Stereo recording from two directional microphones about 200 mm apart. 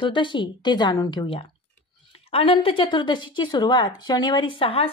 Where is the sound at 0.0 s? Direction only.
25° left (ahead or behind).